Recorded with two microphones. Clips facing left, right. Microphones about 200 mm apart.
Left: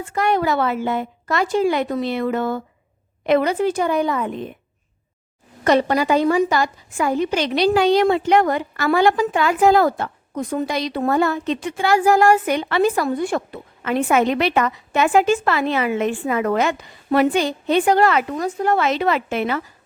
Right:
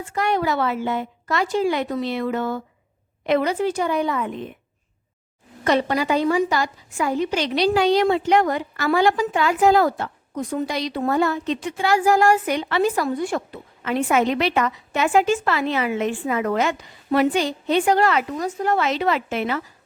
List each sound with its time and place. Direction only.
0.1 s a woman's voice: 50° left (ahead or behind)
5.6 s a woman's voice: 45° left (ahead or behind)